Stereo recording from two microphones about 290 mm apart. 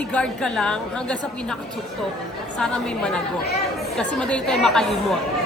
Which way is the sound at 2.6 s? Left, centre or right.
Centre.